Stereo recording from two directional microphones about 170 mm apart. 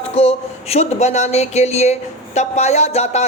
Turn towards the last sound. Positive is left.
turn(degrees=40)  # may be behind; listen again after turning